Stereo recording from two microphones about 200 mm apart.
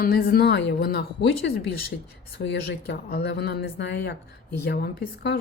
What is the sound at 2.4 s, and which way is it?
A woman's voice, 60° left (ahead or behind).